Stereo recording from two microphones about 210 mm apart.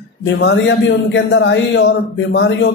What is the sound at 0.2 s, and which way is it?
A man's voice, 55° left (ahead or behind).